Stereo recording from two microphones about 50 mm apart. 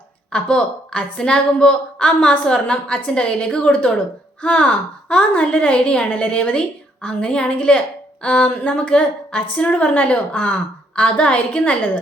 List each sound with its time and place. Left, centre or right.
0.3 s a woman's voice: centre